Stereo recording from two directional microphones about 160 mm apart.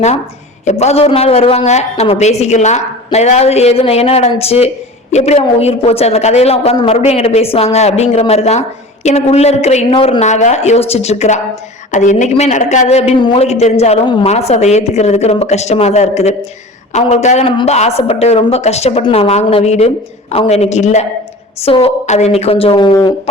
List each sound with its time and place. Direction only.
0.6 s speech: 45° left (ahead or behind)
13.1 s a woman's voice: 30° left (ahead or behind)
13.4 s speech: 45° left (ahead or behind)
14.0 s a woman's voice: 30° left (ahead or behind)
14.3 s speech: 40° left (ahead or behind)